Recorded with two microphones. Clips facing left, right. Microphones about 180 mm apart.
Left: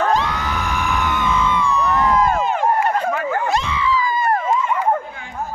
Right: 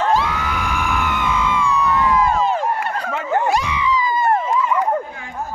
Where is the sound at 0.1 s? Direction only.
5° right (ahead or behind).